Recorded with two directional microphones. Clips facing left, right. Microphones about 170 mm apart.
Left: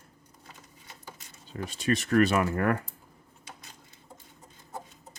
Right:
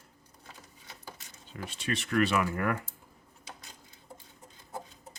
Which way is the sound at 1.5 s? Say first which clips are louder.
Left 6 dB; 40° left (ahead or behind).